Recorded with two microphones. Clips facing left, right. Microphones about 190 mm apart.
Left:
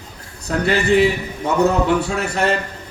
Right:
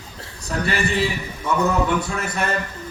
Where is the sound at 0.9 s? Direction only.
65° left (ahead or behind).